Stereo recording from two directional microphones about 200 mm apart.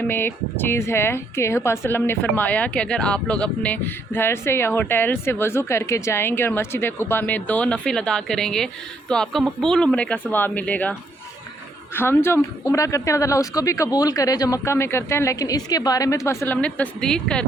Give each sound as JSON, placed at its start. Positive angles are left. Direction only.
{"t": 0.1, "sound": "speech", "side_deg": 10}
{"t": 11.9, "sound": "speech", "side_deg": 10}